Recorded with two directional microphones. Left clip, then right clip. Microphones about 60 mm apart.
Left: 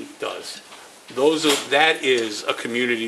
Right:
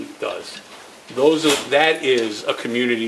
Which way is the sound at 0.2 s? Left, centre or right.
Left.